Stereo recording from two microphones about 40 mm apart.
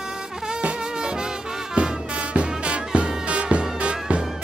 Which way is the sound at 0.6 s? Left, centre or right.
Right.